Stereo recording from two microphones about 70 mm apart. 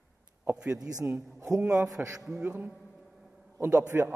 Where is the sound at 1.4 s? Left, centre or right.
Right.